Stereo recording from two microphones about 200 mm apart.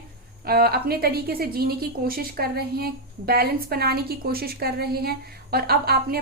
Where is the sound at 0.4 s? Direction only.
50° right (ahead or behind).